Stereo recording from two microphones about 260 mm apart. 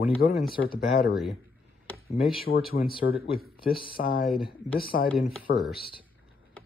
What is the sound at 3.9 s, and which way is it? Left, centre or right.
Speech, left.